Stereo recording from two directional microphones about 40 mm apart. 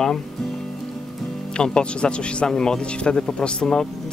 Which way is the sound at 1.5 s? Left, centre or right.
Left.